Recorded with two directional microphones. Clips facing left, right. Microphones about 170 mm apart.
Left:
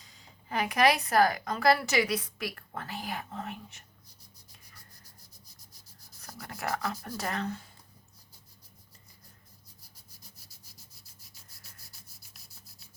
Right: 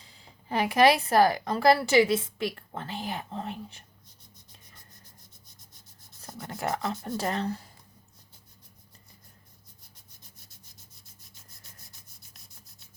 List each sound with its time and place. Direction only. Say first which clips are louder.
0.0 s speech: right 2 dB; 30° right (ahead or behind)
6.2 s speech: right 4 dB; 25° right (ahead or behind)